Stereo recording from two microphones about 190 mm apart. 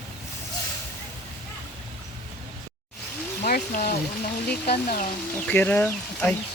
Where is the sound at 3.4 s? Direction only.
45° left (ahead or behind).